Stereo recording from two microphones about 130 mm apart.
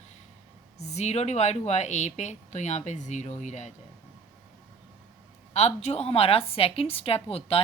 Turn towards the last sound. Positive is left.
turn(degrees=50)  # may be behind; listen again after turning